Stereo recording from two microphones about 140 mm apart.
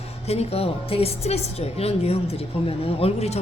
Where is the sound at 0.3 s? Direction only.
45° left (ahead or behind).